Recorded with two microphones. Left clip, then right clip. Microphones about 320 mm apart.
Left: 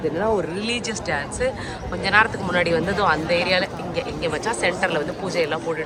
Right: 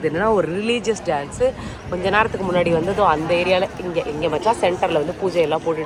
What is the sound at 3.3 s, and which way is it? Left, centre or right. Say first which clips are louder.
Speech: right 2 dB; centre.